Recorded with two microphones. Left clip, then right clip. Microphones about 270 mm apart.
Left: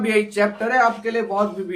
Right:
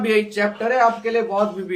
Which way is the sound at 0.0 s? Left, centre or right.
Centre.